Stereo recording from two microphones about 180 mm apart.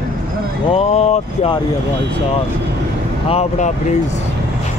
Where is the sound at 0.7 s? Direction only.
35° left (ahead or behind).